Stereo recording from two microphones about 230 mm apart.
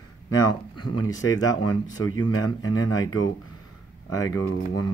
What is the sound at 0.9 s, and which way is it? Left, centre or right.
Speech, left.